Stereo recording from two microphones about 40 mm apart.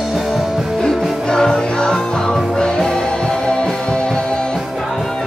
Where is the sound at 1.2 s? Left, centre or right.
Centre.